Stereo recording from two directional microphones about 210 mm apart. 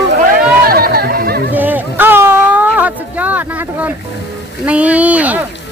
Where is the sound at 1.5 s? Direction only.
10° right (ahead or behind).